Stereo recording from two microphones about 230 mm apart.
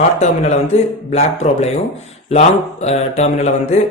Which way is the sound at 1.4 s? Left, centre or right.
Left.